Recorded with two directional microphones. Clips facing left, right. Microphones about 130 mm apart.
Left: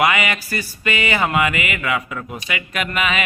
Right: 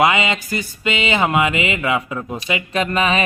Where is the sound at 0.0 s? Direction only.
25° right (ahead or behind).